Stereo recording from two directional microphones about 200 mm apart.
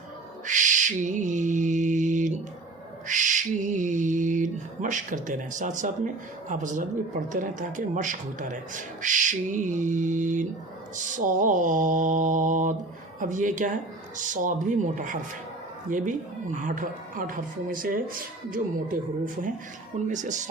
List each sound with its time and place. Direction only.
0.4 s owl: 40° right (ahead or behind)
6.5 s speech: 40° right (ahead or behind)